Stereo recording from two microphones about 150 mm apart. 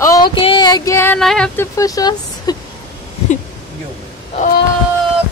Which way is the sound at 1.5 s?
20° left (ahead or behind).